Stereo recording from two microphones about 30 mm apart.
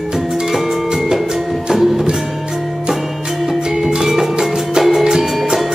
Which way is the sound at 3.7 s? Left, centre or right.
Centre.